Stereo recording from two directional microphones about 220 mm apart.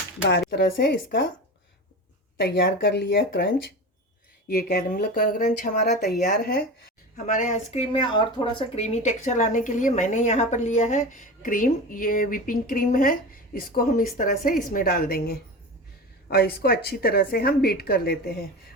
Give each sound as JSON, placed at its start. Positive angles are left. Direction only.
{"t": 0.2, "sound": "a woman's voice", "side_deg": 50}
{"t": 2.4, "sound": "a woman's voice", "side_deg": 55}